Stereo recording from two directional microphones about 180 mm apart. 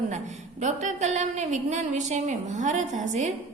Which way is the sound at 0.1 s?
40° right (ahead or behind).